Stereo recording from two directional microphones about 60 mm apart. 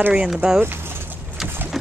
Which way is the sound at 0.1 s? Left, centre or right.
Centre.